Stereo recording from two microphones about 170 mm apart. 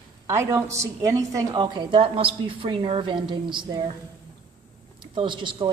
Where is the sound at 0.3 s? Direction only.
15° right (ahead or behind).